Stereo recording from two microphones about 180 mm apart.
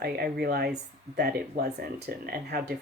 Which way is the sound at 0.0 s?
60° right (ahead or behind).